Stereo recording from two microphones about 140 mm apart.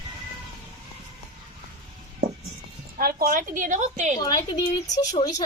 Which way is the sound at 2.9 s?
85° right.